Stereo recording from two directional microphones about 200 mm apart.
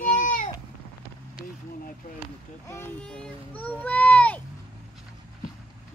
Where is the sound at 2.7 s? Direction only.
10° left (ahead or behind).